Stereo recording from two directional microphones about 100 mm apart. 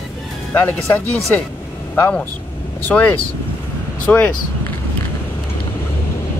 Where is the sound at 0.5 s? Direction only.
20° left (ahead or behind).